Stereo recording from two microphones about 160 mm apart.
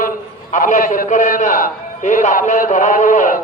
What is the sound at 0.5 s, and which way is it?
A man's voice, 55° left (ahead or behind).